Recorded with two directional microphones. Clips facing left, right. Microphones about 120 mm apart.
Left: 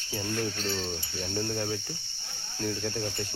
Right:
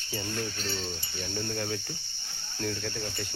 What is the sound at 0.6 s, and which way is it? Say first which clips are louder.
Cricket: left 3 dB; 20° left (ahead or behind).